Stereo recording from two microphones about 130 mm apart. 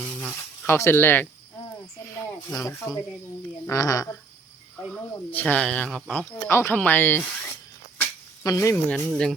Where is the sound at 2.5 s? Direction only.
25° left (ahead or behind).